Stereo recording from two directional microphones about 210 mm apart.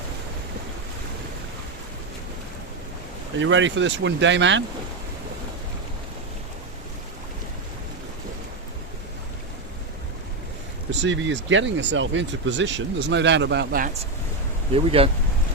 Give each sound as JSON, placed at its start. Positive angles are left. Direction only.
{"t": 3.3, "sound": "speech", "side_deg": -60}
{"t": 11.0, "sound": "speech", "side_deg": -60}
{"t": 14.7, "sound": "speech", "side_deg": -25}